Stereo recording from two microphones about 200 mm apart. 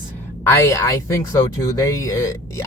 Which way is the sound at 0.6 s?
15° left (ahead or behind).